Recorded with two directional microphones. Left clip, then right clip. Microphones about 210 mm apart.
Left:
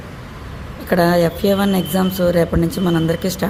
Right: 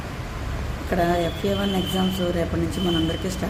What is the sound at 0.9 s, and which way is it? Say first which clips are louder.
A woman's voice: left 8 dB; 50° left (ahead or behind).